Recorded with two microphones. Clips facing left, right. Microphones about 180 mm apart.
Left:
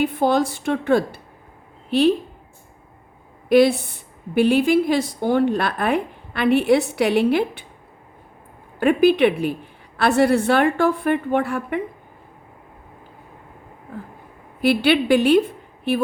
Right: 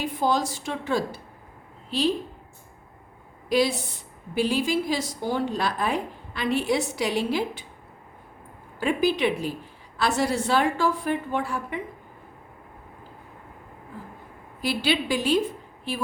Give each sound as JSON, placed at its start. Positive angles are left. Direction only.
{"t": 0.0, "sound": "a woman's voice", "side_deg": 60}
{"t": 3.5, "sound": "a woman's voice", "side_deg": 60}
{"t": 8.8, "sound": "a woman's voice", "side_deg": 60}
{"t": 14.6, "sound": "a woman's voice", "side_deg": 60}